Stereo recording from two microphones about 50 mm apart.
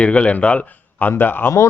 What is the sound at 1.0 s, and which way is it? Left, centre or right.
Speech, left.